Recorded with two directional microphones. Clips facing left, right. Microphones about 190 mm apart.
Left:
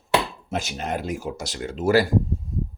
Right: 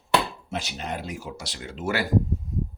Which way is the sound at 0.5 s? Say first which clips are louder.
Left 5 dB; 45° left (ahead or behind).